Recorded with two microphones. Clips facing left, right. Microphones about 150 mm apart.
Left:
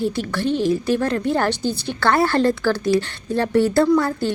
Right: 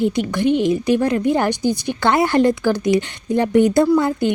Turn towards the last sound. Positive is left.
turn(degrees=-15)  # may be behind; listen again after turning